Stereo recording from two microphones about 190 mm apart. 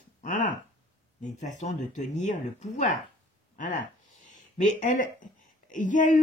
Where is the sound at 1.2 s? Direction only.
40° left (ahead or behind).